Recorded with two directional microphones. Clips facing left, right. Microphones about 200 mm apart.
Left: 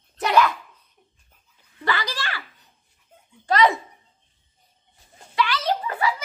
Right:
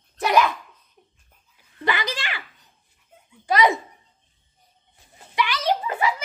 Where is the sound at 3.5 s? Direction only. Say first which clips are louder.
Even; 10° right (ahead or behind).